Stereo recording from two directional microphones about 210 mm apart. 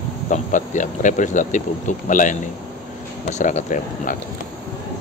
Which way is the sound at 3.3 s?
35° left (ahead or behind).